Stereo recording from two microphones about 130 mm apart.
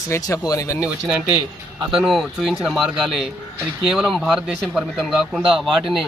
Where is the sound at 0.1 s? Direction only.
25° left (ahead or behind).